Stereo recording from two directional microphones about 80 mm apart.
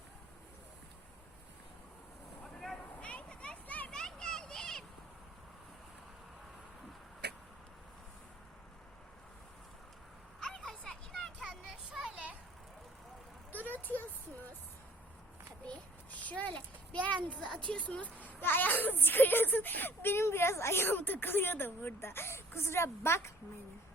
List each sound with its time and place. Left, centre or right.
2.4 s vehicle: centre
2.8 s children playing: centre
10.4 s music: centre
11.7 s children playing: centre
13.7 s a sound: left
16.2 s a sound: centre
17.7 s speech: centre; by 23.3 s left